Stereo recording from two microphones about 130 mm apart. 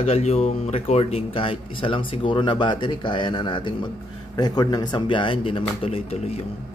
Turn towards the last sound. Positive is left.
turn(degrees=50)  # may be behind; listen again after turning